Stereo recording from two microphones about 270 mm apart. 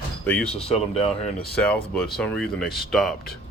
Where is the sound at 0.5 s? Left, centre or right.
Left.